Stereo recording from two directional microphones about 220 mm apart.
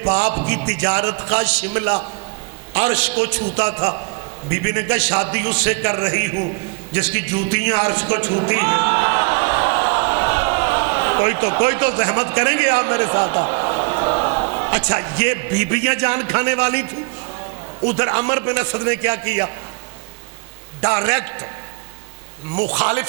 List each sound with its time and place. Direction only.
0.1 s a man's voice: 10° right (ahead or behind)
3.8 s a man's voice: 20° right (ahead or behind)
6.9 s music: 10° right (ahead or behind)
14.9 s a man's voice: 15° right (ahead or behind)
20.8 s a man's voice: 10° right (ahead or behind)
22.7 s a man's voice: 10° right (ahead or behind)